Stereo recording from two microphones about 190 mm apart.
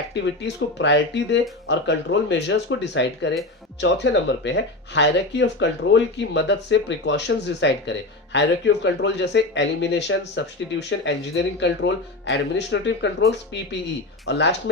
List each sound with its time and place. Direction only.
0.1 s speech: 70° left (ahead or behind)
14.3 s speech: 65° left (ahead or behind)